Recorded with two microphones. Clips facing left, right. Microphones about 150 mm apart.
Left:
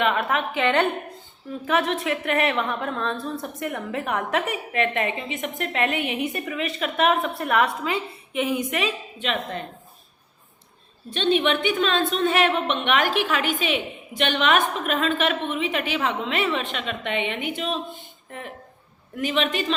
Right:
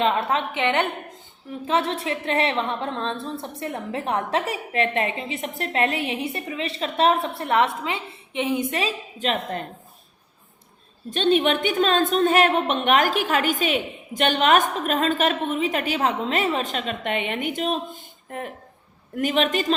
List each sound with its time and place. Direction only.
0.0 s a woman's voice: 25° right (ahead or behind)
11.1 s a woman's voice: 45° right (ahead or behind)